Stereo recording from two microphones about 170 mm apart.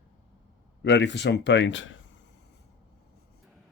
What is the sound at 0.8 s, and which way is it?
Speech, 90° left.